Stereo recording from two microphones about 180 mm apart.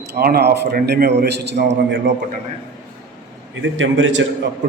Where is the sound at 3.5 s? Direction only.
90° right.